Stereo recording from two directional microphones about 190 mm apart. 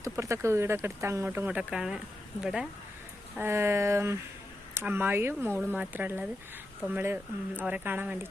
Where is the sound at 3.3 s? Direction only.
15° right (ahead or behind).